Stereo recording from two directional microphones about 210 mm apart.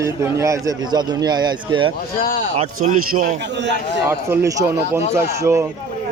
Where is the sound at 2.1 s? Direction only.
40° left (ahead or behind).